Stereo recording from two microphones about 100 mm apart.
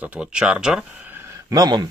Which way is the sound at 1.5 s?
45° right (ahead or behind).